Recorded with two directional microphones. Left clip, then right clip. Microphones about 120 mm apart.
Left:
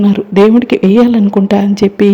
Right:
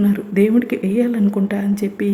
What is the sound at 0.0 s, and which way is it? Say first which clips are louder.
A woman's voice: left 9 dB; 35° left (ahead or behind).